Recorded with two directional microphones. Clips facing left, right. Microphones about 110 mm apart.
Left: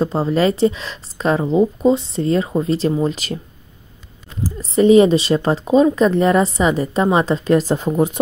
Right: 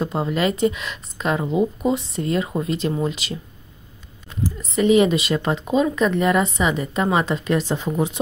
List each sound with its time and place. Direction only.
0.0 s a woman's voice: 30° left (ahead or behind)
4.4 s a woman's voice: 30° left (ahead or behind)